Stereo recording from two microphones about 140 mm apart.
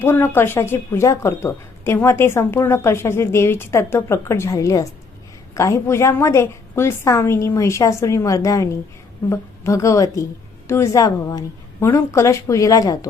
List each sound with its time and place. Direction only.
0.0 s a woman's voice: 15° left (ahead or behind)